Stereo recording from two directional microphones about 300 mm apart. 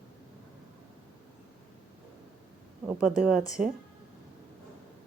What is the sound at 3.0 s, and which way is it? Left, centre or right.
Speech, centre.